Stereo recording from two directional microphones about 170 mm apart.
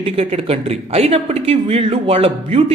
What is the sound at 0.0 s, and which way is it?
Speech, 35° right (ahead or behind).